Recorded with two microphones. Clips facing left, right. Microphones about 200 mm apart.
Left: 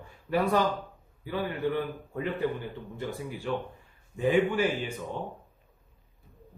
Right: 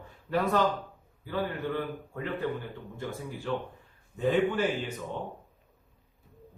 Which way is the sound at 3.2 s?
15° left (ahead or behind).